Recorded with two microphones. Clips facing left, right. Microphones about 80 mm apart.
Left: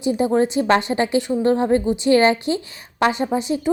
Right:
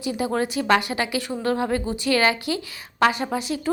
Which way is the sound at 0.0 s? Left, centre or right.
Left.